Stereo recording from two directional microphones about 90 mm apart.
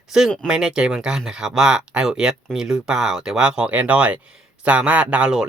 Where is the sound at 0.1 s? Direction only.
5° right (ahead or behind).